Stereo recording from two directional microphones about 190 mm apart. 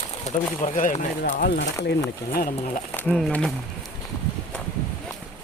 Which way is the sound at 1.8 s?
55° left (ahead or behind).